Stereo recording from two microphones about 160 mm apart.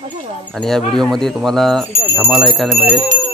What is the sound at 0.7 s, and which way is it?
Speech, centre (ahead or behind).